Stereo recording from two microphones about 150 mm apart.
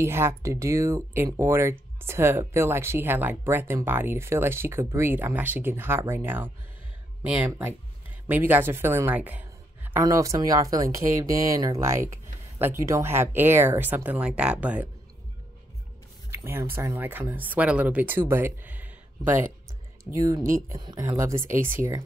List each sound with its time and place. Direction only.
0.0 s speech: 20° right (ahead or behind)
9.9 s speech: 20° right (ahead or behind)
16.3 s a sound: 15° right (ahead or behind)
16.7 s speech: 15° right (ahead or behind)
20.2 s speech: 25° right (ahead or behind)